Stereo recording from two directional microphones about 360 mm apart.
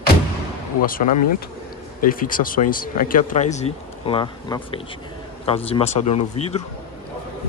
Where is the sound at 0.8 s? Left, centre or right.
Left.